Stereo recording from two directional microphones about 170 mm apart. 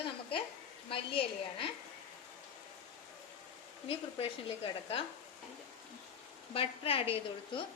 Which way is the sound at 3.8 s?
35° left (ahead or behind).